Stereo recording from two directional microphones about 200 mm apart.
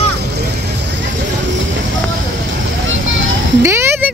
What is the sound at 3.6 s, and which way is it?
Music, 15° right (ahead or behind).